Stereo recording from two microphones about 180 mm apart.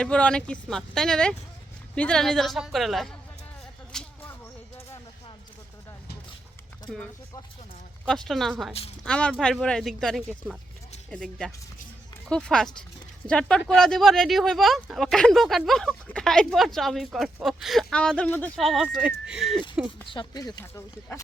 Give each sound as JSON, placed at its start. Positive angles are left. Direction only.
{"t": 0.0, "sound": "speech", "side_deg": 5}
{"t": 3.9, "sound": "a sound", "side_deg": 5}
{"t": 6.9, "sound": "speech", "side_deg": 0}
{"t": 20.1, "sound": "speech", "side_deg": 25}